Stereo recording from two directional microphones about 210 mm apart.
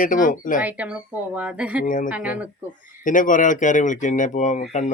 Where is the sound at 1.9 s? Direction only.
40° left (ahead or behind).